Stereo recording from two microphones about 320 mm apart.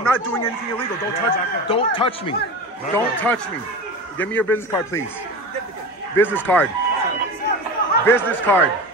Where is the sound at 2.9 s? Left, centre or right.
Centre.